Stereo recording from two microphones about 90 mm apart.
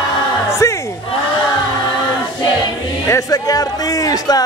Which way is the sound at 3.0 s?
40° left (ahead or behind).